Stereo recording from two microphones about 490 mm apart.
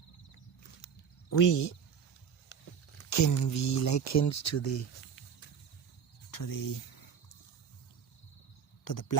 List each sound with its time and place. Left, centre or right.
1.3 s speech: left
3.0 s speech: left
6.3 s cricket: left
8.8 s speech: left